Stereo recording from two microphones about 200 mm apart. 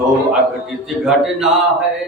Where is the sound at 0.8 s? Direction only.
Centre (ahead or behind).